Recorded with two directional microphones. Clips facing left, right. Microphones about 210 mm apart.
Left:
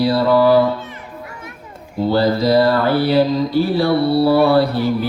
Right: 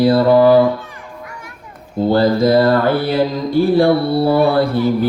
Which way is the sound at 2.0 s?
50° right (ahead or behind).